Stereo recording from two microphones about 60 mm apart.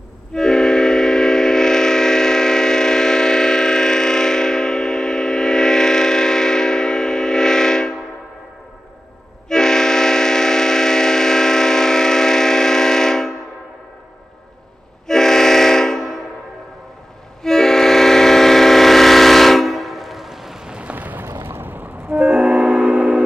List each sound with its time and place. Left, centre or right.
0.3 s train: centre
9.5 s train: centre
15.0 s train: centre
17.4 s train: centre
20.9 s a sound: right
21.3 s train: right